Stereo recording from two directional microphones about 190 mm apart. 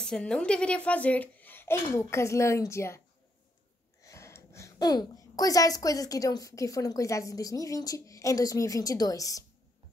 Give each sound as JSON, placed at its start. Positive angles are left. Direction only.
{"t": 0.0, "sound": "a woman's voice", "side_deg": 5}
{"t": 4.0, "sound": "a woman's voice", "side_deg": 15}